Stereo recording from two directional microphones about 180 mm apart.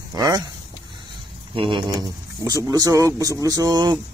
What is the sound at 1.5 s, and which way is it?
Speech, 30° right (ahead or behind).